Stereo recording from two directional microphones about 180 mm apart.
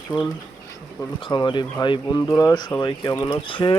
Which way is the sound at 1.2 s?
25° left (ahead or behind).